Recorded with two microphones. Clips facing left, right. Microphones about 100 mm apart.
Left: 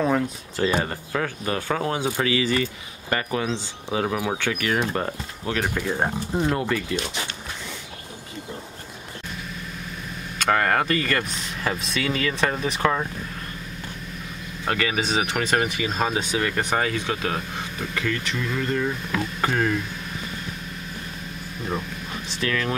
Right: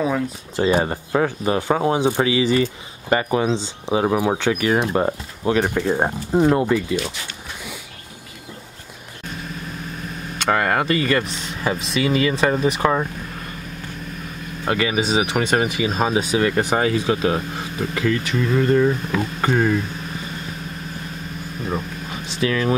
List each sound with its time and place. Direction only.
0.6 s speech: 20° right (ahead or behind)
10.5 s speech: 10° right (ahead or behind)
14.7 s speech: 10° right (ahead or behind)
16.3 s speech: 20° right (ahead or behind)
18.0 s speech: 30° right (ahead or behind)
19.4 s speech: 15° right (ahead or behind)
22.4 s speech: 15° right (ahead or behind)